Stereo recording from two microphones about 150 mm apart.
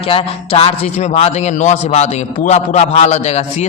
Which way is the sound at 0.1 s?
40° left (ahead or behind).